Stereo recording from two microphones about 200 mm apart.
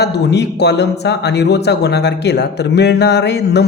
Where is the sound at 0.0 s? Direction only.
55° left (ahead or behind).